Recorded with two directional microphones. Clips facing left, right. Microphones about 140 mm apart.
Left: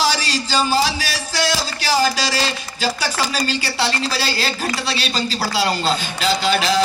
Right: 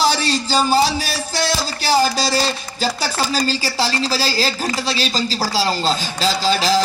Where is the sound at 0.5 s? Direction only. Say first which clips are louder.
Right 2 dB; 40° right (ahead or behind).